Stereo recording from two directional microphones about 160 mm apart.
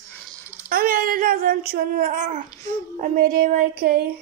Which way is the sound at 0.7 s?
70° right (ahead or behind).